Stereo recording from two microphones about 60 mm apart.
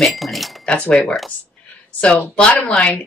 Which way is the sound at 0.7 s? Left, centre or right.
Left.